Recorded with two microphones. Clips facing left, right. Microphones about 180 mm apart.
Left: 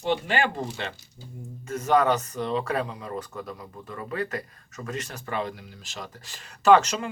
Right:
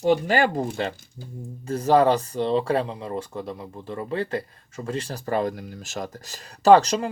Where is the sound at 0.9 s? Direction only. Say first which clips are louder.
Right 4 dB; 50° right (ahead or behind).